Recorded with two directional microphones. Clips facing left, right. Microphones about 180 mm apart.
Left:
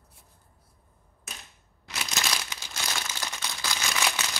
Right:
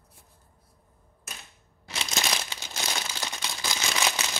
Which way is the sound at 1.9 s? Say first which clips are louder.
Right 2 dB; 25° right (ahead or behind).